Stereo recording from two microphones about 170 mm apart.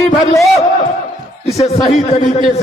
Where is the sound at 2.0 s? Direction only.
40° left (ahead or behind).